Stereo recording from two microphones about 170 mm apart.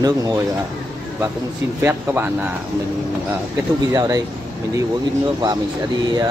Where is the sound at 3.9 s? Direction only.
20° right (ahead or behind).